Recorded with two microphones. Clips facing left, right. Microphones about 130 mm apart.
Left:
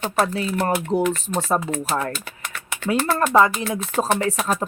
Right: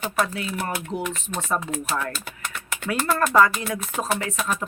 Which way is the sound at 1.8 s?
35° left (ahead or behind).